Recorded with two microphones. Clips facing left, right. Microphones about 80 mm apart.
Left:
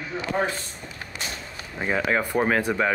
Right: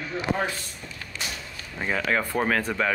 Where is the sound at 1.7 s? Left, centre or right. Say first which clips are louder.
Left 2 dB; centre.